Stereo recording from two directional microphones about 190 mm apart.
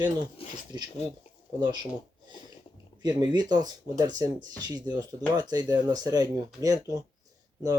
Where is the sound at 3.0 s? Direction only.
20° right (ahead or behind).